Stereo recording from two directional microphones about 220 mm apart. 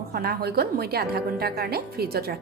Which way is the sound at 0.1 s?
45° right (ahead or behind).